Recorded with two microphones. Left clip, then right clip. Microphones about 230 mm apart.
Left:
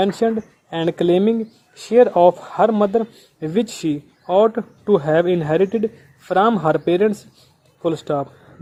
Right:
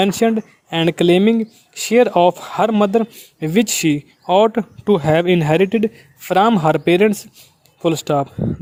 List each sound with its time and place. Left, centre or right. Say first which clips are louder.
0.0 s speech: right 2 dB; right